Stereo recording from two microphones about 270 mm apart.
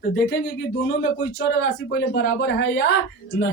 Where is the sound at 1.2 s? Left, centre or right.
Left.